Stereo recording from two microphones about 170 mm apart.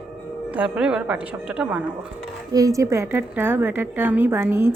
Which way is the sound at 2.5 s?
20° right (ahead or behind).